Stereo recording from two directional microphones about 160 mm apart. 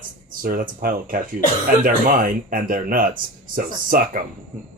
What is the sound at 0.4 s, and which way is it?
Speech, 60° right (ahead or behind).